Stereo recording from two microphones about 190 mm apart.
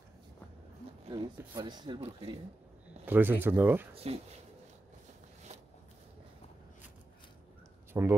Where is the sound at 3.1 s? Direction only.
10° right (ahead or behind).